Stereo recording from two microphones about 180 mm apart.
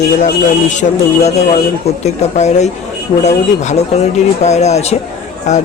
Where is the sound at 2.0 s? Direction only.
40° left (ahead or behind).